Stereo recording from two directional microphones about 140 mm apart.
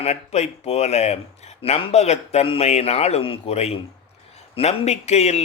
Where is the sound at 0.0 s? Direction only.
50° left (ahead or behind).